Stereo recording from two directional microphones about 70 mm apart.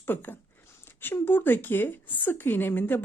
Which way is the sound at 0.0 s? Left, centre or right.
Left.